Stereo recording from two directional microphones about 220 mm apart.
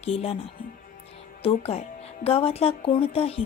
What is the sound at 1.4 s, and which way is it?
Speech, 25° left (ahead or behind).